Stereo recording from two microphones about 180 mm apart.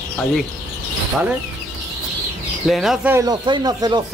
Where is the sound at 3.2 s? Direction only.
25° right (ahead or behind).